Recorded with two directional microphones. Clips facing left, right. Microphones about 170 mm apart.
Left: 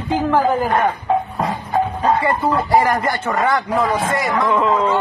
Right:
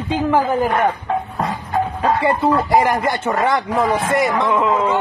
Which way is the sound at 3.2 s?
25° right (ahead or behind).